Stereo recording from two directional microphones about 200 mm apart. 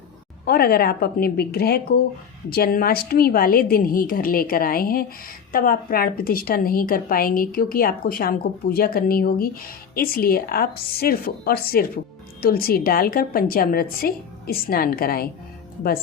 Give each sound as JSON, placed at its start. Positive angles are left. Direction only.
{"t": 0.4, "sound": "a woman's voice", "side_deg": 50}